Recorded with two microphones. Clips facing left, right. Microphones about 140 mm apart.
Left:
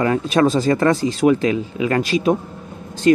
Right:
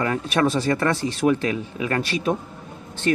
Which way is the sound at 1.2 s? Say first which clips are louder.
Left 5 dB; 20° left (ahead or behind).